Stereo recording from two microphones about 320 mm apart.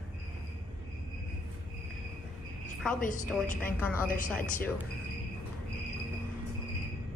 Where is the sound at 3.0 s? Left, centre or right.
Left.